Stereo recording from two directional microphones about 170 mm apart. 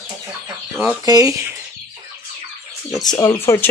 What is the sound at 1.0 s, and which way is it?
Speech, 20° right (ahead or behind).